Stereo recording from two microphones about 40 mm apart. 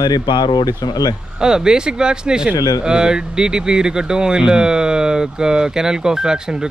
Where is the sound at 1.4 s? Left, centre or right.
Centre.